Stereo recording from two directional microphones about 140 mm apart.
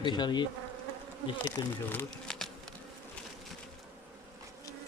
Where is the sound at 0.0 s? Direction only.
30° left (ahead or behind).